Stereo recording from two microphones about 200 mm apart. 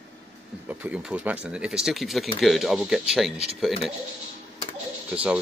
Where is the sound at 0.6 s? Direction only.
5° right (ahead or behind).